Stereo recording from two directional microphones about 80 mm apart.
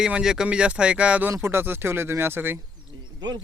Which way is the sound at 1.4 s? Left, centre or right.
Right.